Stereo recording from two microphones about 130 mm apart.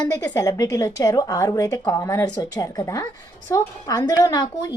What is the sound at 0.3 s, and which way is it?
A woman's voice, 25° left (ahead or behind).